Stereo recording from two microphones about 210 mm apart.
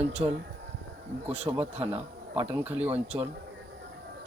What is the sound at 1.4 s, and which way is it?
Speech, 25° right (ahead or behind).